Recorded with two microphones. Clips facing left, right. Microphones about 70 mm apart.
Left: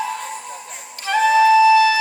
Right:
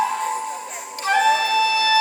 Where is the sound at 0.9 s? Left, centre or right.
Right.